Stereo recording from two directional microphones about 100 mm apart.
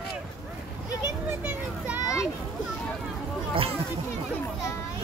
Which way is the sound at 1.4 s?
20° right (ahead or behind).